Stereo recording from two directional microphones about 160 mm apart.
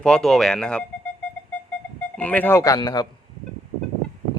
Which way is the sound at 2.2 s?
10° left (ahead or behind).